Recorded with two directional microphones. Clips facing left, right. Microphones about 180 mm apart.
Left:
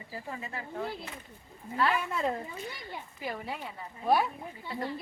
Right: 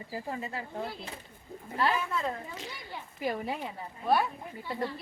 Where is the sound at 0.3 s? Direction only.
35° right (ahead or behind).